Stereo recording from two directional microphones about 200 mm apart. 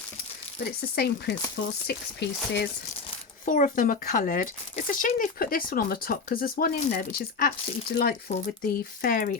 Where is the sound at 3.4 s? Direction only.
40° left (ahead or behind).